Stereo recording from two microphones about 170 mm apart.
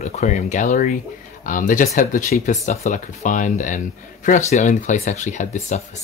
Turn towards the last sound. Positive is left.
turn(degrees=40)  # may be behind; listen again after turning